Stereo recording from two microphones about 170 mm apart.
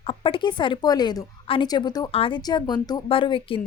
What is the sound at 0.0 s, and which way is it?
A woman's voice, 30° left (ahead or behind).